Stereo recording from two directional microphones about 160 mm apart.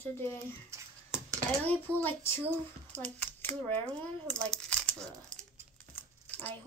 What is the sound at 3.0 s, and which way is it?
Speech, 10° left (ahead or behind).